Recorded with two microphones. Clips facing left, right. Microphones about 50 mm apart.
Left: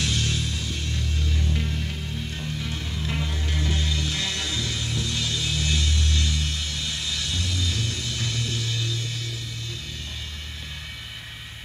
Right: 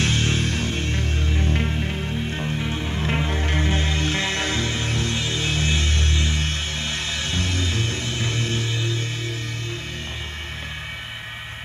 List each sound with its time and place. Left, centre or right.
0.0 s music: right
5.1 s music: right